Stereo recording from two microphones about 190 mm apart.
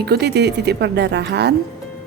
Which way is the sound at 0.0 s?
60° right (ahead or behind).